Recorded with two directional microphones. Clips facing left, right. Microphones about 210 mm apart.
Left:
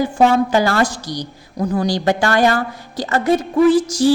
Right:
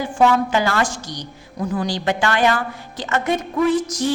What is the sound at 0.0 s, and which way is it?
A woman's voice, 40° left (ahead or behind).